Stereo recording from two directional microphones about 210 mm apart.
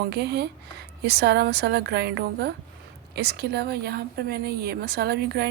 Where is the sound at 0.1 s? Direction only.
50° right (ahead or behind).